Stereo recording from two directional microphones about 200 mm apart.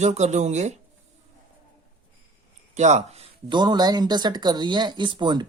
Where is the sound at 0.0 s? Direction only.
35° right (ahead or behind).